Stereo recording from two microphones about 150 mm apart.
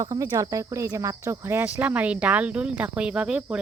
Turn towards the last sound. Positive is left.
turn(degrees=-5)  # may be behind; listen again after turning